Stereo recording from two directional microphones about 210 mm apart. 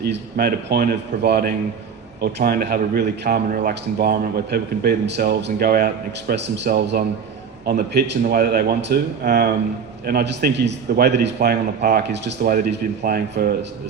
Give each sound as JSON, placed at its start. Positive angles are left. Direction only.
{"t": 0.0, "sound": "speech", "side_deg": -50}